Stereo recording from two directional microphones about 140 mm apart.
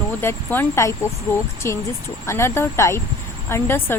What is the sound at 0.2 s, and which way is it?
Speech, 15° left (ahead or behind).